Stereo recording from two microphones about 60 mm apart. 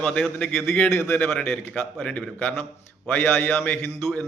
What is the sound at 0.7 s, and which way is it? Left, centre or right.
Speech, left.